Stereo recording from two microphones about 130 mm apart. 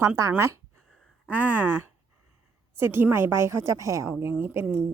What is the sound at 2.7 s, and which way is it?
A woman's voice, 15° right (ahead or behind).